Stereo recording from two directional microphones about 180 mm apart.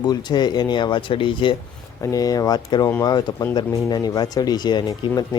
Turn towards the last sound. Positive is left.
turn(degrees=25)  # may be behind; listen again after turning